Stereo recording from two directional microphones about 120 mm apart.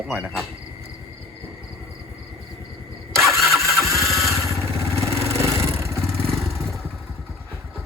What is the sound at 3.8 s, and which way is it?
Engine starting, 25° right (ahead or behind).